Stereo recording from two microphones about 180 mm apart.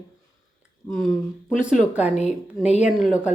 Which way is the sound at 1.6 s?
5° right (ahead or behind).